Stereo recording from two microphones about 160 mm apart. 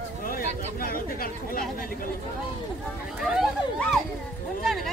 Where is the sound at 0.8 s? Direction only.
65° left (ahead or behind).